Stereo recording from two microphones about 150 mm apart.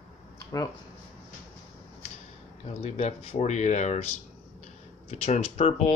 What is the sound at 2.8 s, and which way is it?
Speech, 50° left (ahead or behind).